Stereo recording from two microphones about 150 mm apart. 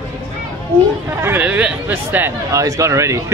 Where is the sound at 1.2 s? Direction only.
10° right (ahead or behind).